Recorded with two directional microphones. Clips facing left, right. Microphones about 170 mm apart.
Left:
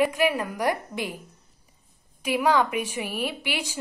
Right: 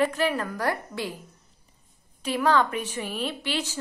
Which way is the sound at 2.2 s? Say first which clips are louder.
Left 1 dB; 10° left (ahead or behind).